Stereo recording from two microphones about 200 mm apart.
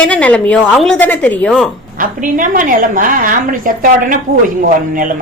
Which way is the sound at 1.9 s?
40° right (ahead or behind).